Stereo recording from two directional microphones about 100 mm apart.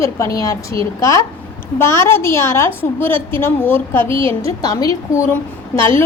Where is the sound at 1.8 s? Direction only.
25° left (ahead or behind).